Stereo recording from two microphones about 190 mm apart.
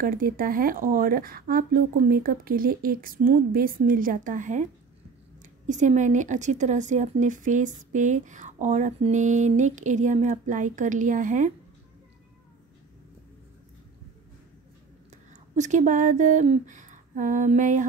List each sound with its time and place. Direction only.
0.0 s a woman's voice: 50° right (ahead or behind)
15.5 s a woman's voice: 40° right (ahead or behind)